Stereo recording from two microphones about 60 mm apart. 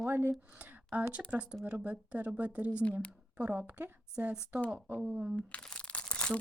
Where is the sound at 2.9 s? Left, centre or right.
Left.